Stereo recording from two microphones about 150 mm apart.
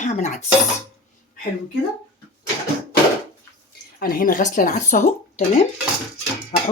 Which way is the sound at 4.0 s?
70° left (ahead or behind).